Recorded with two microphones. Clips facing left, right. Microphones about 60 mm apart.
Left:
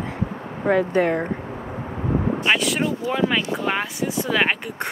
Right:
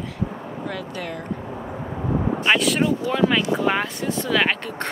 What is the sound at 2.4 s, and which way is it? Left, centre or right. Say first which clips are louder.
Speech: right 4 dB; centre.